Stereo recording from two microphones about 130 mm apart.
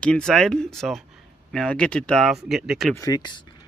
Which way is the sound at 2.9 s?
30° left (ahead or behind).